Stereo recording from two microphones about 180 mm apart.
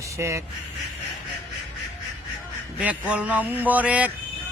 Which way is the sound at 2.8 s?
5° right (ahead or behind).